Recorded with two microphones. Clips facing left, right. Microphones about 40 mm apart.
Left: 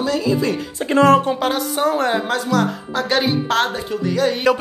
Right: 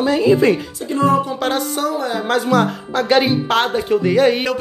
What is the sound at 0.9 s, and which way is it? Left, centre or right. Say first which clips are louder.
Speech: left 3 dB; left.